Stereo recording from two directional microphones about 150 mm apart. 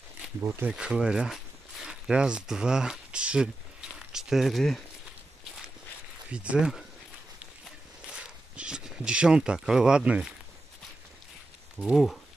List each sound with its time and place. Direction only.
0.4 s speech: 15° right (ahead or behind); by 4.8 s centre (ahead or behind)
6.3 s speech: 5° right (ahead or behind)
8.1 s speech: 5° right (ahead or behind)
11.8 s speech: centre (ahead or behind)